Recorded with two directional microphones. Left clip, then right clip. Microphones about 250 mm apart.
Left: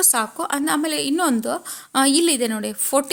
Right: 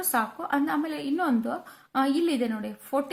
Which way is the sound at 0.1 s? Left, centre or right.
Left.